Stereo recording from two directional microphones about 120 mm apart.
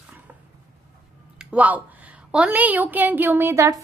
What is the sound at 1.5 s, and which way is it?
A woman's voice, 10° right (ahead or behind).